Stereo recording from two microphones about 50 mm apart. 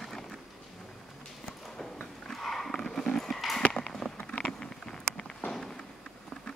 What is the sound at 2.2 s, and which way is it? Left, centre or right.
Horse, centre.